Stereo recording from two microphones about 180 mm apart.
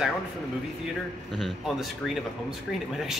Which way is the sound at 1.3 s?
Centre (ahead or behind).